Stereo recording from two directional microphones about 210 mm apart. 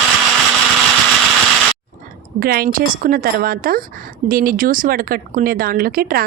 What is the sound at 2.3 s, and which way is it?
Speech, 45° right (ahead or behind).